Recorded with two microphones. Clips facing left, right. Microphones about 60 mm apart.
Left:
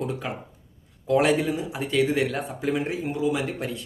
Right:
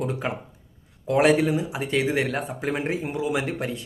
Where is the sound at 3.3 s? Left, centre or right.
Right.